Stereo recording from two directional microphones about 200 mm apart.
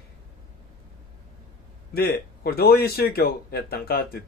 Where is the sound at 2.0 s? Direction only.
50° left (ahead or behind).